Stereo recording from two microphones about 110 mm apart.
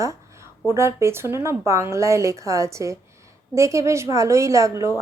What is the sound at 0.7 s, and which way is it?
Speech, 25° right (ahead or behind).